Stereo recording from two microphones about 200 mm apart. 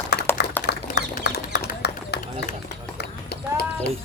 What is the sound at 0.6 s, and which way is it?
Bird, 55° left (ahead or behind).